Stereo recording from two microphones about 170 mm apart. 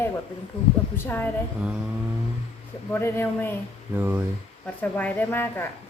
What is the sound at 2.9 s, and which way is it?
Speech, 15° left (ahead or behind).